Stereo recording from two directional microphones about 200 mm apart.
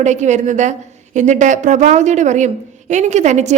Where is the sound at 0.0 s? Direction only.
35° right (ahead or behind).